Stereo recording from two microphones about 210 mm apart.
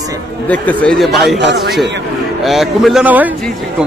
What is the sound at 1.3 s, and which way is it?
Speech, 55° right (ahead or behind).